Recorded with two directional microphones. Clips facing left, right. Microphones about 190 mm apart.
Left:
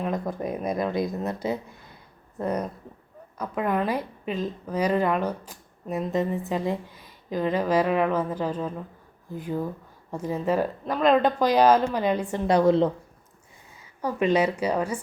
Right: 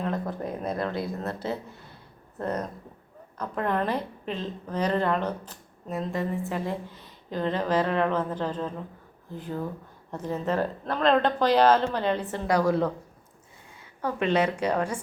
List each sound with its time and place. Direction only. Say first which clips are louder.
0.0 s a woman's voice: left 2 dB; 15° left (ahead or behind)
12.5 s a woman's voice: left 4 dB; 25° left (ahead or behind)
14.0 s a woman's voice: left 2 dB; 10° left (ahead or behind)